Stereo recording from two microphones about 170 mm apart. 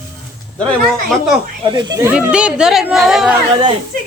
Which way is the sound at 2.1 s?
5° right (ahead or behind).